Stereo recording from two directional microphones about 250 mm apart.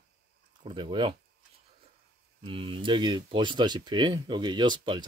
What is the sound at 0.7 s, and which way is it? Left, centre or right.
Speech, centre.